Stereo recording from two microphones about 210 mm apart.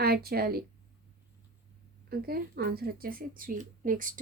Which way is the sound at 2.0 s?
45° right (ahead or behind).